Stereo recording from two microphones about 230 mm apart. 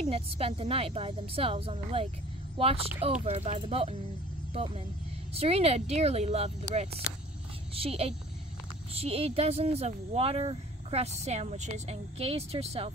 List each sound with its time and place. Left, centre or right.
0.1 s speech: right
5.3 s speech: right